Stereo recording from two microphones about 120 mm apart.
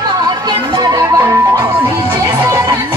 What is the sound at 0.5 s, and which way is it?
Music, 35° right (ahead or behind).